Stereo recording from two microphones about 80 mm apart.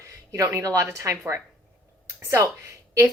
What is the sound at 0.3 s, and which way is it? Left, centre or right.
A woman's voice, right.